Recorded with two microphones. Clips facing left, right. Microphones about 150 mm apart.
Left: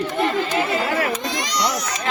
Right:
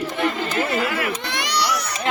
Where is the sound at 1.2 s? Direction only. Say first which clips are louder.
Left 1 dB; 65° right (ahead or behind).